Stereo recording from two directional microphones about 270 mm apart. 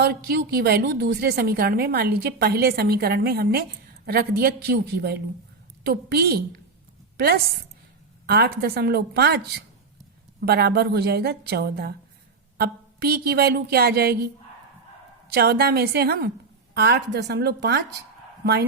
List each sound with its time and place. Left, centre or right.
0.0 s a woman's voice: right
15.3 s a woman's voice: right